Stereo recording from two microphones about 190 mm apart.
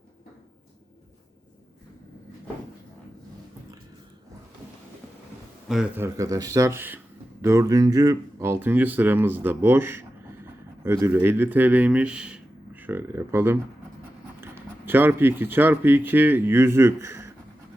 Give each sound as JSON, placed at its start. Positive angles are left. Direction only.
{"t": 5.6, "sound": "a man's voice", "side_deg": -5}
{"t": 6.1, "sound": "speech", "side_deg": -15}
{"t": 14.8, "sound": "speech", "side_deg": -10}